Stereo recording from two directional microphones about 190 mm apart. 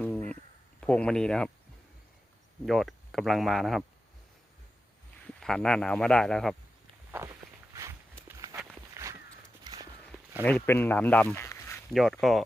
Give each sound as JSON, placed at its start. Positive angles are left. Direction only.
{"t": 0.0, "sound": "a sound", "side_deg": 5}
{"t": 0.8, "sound": "speech", "side_deg": 5}
{"t": 2.6, "sound": "speech", "side_deg": 0}
{"t": 5.3, "sound": "speech", "side_deg": 5}
{"t": 7.1, "sound": "walk", "side_deg": -15}
{"t": 9.0, "sound": "walk", "side_deg": -15}
{"t": 10.4, "sound": "speech", "side_deg": 10}
{"t": 11.9, "sound": "speech", "side_deg": 0}